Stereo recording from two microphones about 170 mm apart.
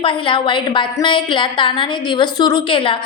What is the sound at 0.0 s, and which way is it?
A woman's voice, 30° left (ahead or behind).